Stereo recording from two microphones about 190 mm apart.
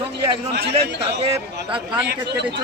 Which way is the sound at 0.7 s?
30° right (ahead or behind).